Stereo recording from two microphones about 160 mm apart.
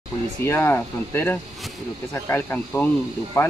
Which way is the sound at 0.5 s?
15° left (ahead or behind).